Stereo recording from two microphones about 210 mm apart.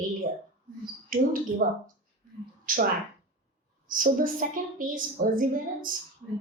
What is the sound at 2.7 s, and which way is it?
Speech, 40° right (ahead or behind).